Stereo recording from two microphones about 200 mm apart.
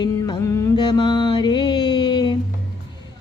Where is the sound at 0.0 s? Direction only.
20° left (ahead or behind).